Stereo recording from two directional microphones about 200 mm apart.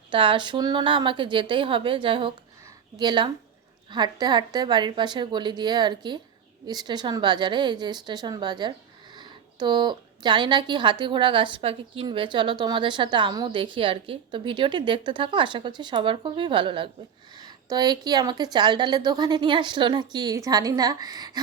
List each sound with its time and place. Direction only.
0.1 s a woman's voice: 25° right (ahead or behind)